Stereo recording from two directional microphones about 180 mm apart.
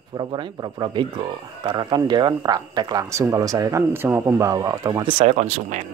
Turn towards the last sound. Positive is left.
turn(degrees=-40)  # may be behind; listen again after turning